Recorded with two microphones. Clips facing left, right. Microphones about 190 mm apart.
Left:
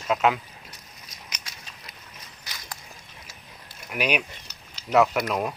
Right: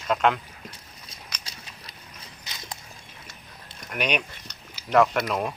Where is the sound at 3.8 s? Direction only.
5° left (ahead or behind).